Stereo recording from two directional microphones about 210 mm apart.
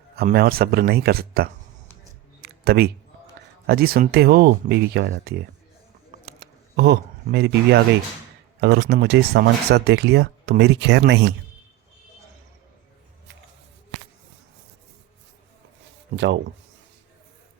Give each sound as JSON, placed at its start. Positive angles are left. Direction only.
{"t": 0.2, "sound": "speech", "side_deg": -45}
{"t": 2.4, "sound": "a sound", "side_deg": -45}
{"t": 3.7, "sound": "speech", "side_deg": -45}
{"t": 6.2, "sound": "a sound", "side_deg": -50}
{"t": 8.6, "sound": "speech", "side_deg": -50}
{"t": 16.1, "sound": "speech", "side_deg": -55}